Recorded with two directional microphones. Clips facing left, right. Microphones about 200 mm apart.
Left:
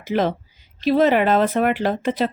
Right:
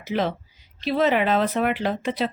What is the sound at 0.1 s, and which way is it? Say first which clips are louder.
A woman's voice: left 4 dB; 45° left (ahead or behind).